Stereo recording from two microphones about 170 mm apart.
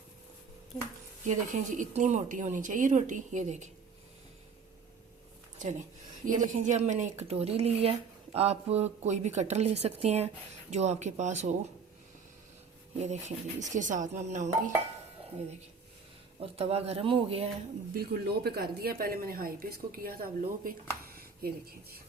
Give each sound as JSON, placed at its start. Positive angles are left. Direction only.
{"t": 1.2, "sound": "a woman's voice", "side_deg": -45}
{"t": 6.2, "sound": "a woman's voice", "side_deg": -50}
{"t": 13.0, "sound": "a woman's voice", "side_deg": -40}
{"t": 16.4, "sound": "speech", "side_deg": -35}
{"t": 17.9, "sound": "a woman's voice", "side_deg": -65}